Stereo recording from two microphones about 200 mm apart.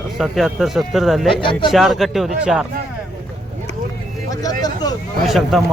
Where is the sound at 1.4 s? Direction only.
25° left (ahead or behind).